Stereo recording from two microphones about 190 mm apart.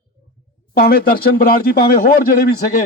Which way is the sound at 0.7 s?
55° left (ahead or behind).